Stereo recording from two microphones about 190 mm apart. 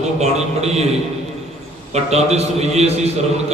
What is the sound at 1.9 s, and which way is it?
Speech, 35° right (ahead or behind).